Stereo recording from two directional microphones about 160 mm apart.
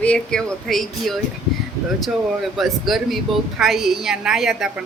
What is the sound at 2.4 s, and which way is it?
Speech, centre (ahead or behind).